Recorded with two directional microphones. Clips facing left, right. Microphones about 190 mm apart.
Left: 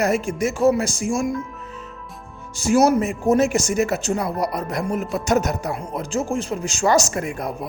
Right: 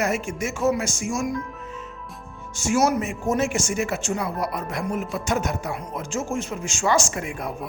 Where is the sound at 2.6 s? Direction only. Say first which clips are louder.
Left 5 dB; 35° left (ahead or behind).